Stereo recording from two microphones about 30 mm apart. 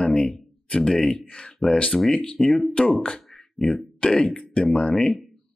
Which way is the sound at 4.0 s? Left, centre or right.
Left.